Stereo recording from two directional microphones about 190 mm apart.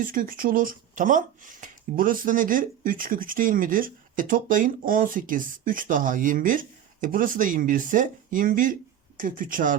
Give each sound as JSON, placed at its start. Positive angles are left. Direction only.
{"t": 0.0, "sound": "speech", "side_deg": -50}